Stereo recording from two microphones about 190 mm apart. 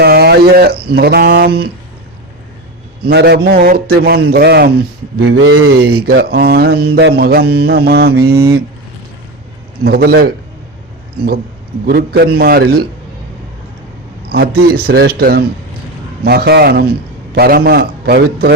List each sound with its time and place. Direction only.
0.0 s speech: 55° right (ahead or behind)
3.0 s a man's voice: 60° right (ahead or behind)
5.4 s speech: 90° right
5.7 s mantra: 55° right (ahead or behind)
9.8 s mantra: 55° right (ahead or behind)
11.9 s mantra: 55° right (ahead or behind)
14.3 s mantra: 55° right (ahead or behind)